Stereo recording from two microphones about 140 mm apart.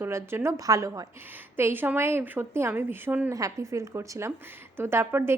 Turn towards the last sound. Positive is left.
turn(degrees=-20)  # may be behind; listen again after turning